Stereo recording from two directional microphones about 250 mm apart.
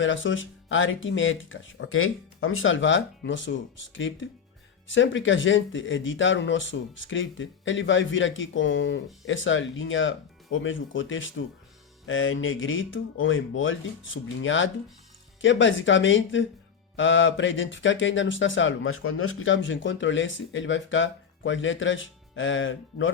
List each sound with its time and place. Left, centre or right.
0.0 s speech: left